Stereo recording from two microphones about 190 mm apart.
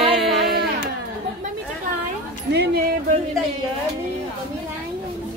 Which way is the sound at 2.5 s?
60° right (ahead or behind).